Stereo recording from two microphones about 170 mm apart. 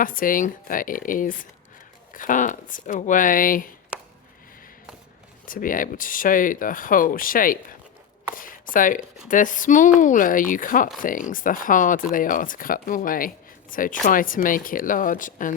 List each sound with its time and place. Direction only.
0.0 s speech: 55° left (ahead or behind)
3.9 s a sound: 5° right (ahead or behind)
5.5 s speech: 55° left (ahead or behind)